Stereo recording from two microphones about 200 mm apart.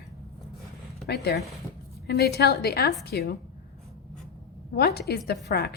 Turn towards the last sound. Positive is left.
turn(degrees=55)  # may be behind; listen again after turning